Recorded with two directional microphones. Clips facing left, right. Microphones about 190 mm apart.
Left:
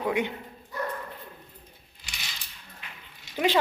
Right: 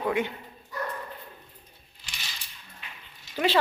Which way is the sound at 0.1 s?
20° left (ahead or behind).